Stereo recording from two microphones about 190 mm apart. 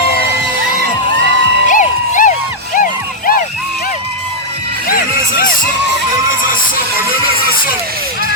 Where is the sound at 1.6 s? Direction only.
45° left (ahead or behind).